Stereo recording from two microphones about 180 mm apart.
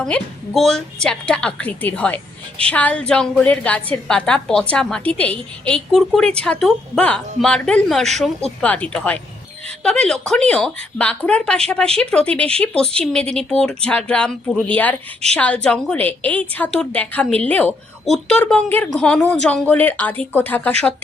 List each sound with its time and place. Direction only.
0.0 s a woman's voice: centre (ahead or behind)